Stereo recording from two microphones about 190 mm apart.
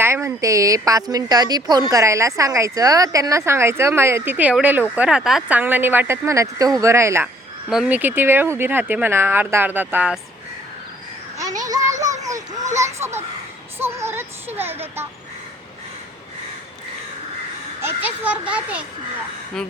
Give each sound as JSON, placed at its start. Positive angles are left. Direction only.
{"t": 0.0, "sound": "a woman's voice", "side_deg": -15}
{"t": 11.6, "sound": "a sound", "side_deg": -20}
{"t": 13.7, "sound": "child singing", "side_deg": -15}
{"t": 17.8, "sound": "a woman's voice", "side_deg": -10}